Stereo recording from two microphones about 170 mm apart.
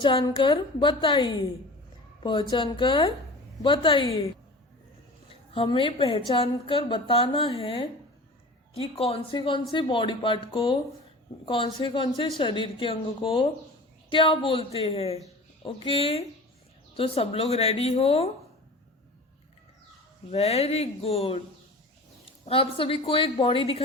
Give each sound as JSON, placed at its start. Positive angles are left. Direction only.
{"t": 0.0, "sound": "a woman's voice", "side_deg": 30}
{"t": 5.3, "sound": "a woman's voice", "side_deg": 35}
{"t": 20.3, "sound": "a woman's voice", "side_deg": 40}
{"t": 22.4, "sound": "a woman's voice", "side_deg": 30}